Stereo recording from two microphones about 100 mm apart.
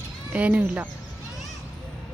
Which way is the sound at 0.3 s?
15° right (ahead or behind).